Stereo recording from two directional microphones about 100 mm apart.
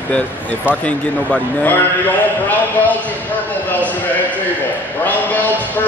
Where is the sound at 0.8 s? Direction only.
15° left (ahead or behind).